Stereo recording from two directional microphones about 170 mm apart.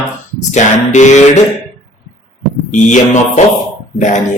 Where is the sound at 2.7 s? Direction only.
45° left (ahead or behind).